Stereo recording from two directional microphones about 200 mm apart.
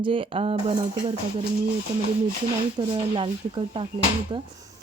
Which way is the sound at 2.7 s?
25° right (ahead or behind).